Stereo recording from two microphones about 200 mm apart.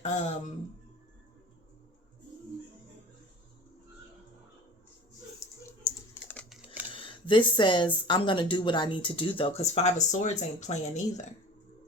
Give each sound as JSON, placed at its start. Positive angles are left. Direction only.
{"t": 0.0, "sound": "speech", "side_deg": 35}
{"t": 5.6, "sound": "typing", "side_deg": 10}
{"t": 6.9, "sound": "speech", "side_deg": 25}